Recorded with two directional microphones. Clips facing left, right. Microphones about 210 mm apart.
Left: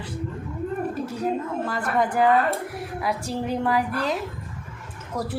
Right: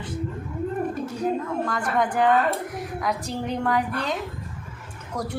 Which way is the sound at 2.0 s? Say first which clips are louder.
Left 1 dB; 5° left (ahead or behind).